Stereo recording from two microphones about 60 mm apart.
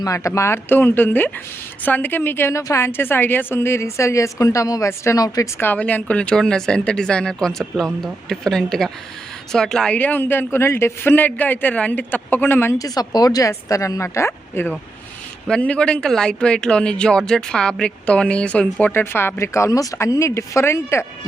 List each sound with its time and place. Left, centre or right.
0.0 s a woman's voice: left
2.5 s a woman's voice: left
2.9 s a woman's voice: left
5.1 s speech: left
5.5 s speech: left
5.8 s speech: left
9.9 s speech: left
12.8 s a woman's voice: left
15.4 s speech: centre
19.1 s a woman's voice: left
20.1 s a woman's voice: left